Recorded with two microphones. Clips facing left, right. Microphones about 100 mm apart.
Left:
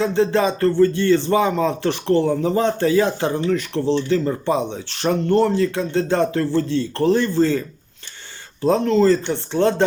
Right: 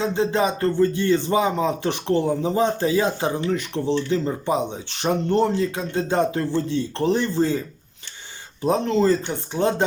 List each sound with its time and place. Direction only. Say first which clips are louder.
0.0 s speech: left 3 dB; 15° right (ahead or behind)
8.6 s speech: left 4 dB; 15° right (ahead or behind)